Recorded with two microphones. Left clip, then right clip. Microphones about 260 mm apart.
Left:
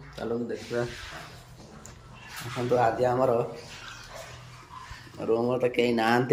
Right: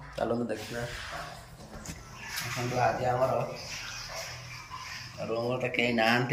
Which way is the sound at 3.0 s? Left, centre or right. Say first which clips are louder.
Left 4 dB; centre.